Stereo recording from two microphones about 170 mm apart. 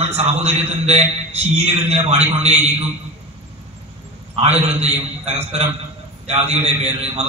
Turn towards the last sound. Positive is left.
turn(degrees=-40)  # may be behind; listen again after turning